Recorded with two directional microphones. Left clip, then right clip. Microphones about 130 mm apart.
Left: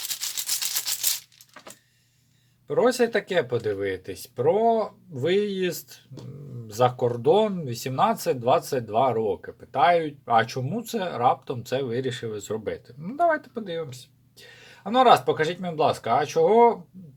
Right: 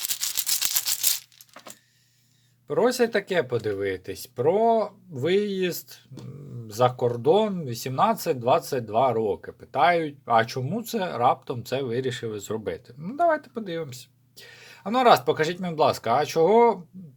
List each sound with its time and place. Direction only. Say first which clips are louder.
2.6 s speech: left 1 dB; 30° right (ahead or behind)